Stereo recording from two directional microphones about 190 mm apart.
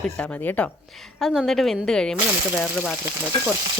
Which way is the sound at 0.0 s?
5° left (ahead or behind).